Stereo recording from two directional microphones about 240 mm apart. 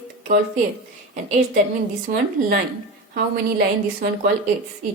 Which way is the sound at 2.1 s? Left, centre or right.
Right.